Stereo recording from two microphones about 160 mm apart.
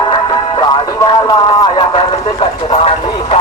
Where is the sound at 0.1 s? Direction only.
30° left (ahead or behind).